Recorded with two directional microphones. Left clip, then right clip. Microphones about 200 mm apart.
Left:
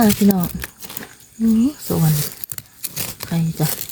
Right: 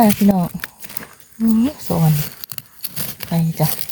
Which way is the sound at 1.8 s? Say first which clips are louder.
Right 2 dB; centre (ahead or behind).